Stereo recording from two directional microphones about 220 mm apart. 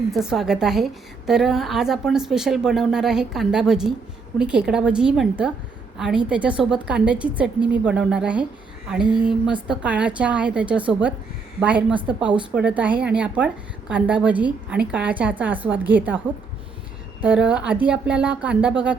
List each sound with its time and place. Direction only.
0.1 s a woman's voice: centre (ahead or behind)
17.2 s a woman's voice: 5° right (ahead or behind)